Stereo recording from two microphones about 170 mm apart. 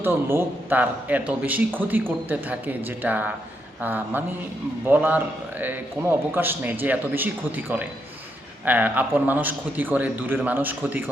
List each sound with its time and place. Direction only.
0.0 s speech: 15° right (ahead or behind)